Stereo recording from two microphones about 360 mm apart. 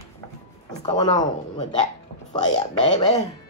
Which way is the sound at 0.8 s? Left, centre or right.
Centre.